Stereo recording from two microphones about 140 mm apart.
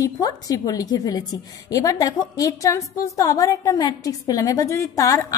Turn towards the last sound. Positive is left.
turn(degrees=20)  # may be behind; listen again after turning